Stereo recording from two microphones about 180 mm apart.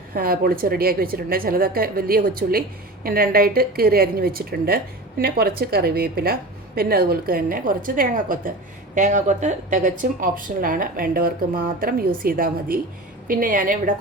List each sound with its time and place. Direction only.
0.1 s a woman's voice: 55° right (ahead or behind)